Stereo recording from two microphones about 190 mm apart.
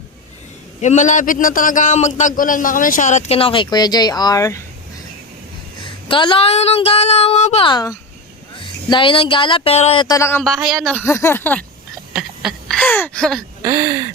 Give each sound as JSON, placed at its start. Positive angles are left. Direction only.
{"t": 0.8, "sound": "a man's voice", "side_deg": 40}
{"t": 5.8, "sound": "speech", "side_deg": 25}
{"t": 10.4, "sound": "speech", "side_deg": 0}
{"t": 12.1, "sound": "a sound", "side_deg": 0}